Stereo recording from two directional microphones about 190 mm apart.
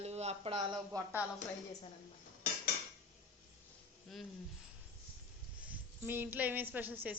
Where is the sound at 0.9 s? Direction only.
20° right (ahead or behind).